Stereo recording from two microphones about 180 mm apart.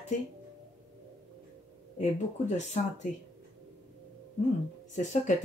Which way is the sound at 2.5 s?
40° left (ahead or behind).